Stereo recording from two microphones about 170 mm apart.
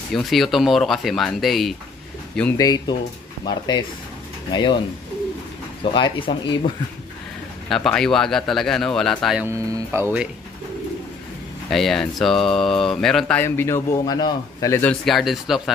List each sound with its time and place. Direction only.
0.1 s speech: centre (ahead or behind)
2.5 s speech: 20° left (ahead or behind)
5.9 s speech: 30° left (ahead or behind)
7.7 s speech: 5° left (ahead or behind)
9.4 s speech: 20° right (ahead or behind)
11.7 s speech: centre (ahead or behind)